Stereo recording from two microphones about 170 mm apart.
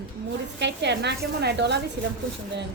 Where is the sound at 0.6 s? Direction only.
85° right.